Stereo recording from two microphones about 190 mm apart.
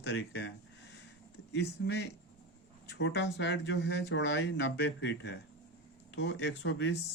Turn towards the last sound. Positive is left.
turn(degrees=70)  # may be behind; listen again after turning